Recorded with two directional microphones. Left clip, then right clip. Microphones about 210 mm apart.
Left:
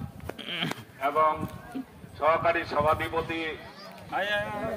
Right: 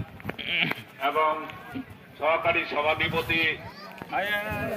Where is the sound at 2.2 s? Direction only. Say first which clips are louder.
Even; 30° left (ahead or behind).